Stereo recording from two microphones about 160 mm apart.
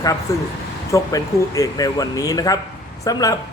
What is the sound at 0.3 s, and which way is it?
Speech, 20° left (ahead or behind).